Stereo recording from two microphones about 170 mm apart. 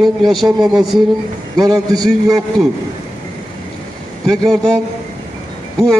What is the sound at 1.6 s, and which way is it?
Speech, 20° right (ahead or behind).